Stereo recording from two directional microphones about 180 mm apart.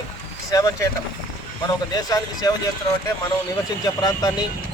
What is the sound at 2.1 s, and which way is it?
Speech, 20° left (ahead or behind).